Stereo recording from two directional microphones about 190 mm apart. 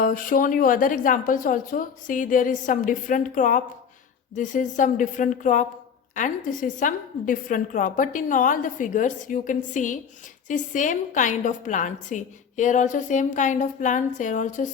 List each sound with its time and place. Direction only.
0.0 s a woman's voice: 45° left (ahead or behind)